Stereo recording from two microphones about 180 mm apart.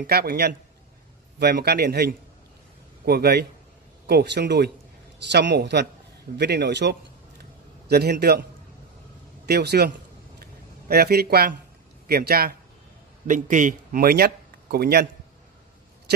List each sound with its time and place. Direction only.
0.0 s a man's voice: 60° right (ahead or behind)
9.5 s a man's voice: 65° right (ahead or behind)
10.4 s a sound: 60° right (ahead or behind)
12.1 s a man's voice: 55° right (ahead or behind)
13.3 s speech: 45° right (ahead or behind); by 15.0 s 60° right (ahead or behind)